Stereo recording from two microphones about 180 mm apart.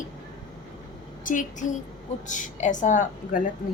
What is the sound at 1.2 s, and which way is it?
A woman's voice, 45° left (ahead or behind).